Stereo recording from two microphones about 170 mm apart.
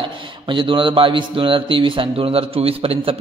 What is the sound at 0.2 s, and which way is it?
A man's voice, 30° right (ahead or behind).